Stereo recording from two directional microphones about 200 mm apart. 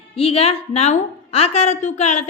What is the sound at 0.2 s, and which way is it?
A woman's voice, 30° left (ahead or behind).